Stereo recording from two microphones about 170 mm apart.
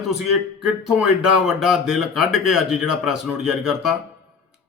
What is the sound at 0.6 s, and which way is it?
Speech, 5° right (ahead or behind).